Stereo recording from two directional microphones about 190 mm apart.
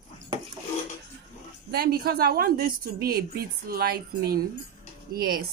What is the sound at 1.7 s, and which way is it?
A woman's voice, 55° right (ahead or behind).